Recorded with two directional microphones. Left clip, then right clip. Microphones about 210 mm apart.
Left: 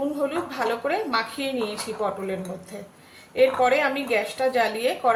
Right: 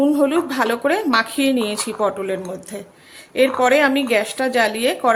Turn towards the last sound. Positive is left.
turn(degrees=-45)  # may be behind; listen again after turning